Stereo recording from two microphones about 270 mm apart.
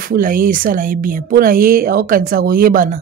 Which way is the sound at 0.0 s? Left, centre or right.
Right.